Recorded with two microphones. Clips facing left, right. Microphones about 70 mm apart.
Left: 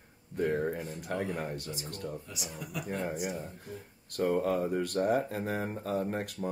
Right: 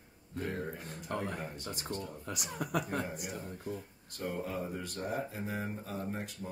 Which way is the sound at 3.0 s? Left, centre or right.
Left.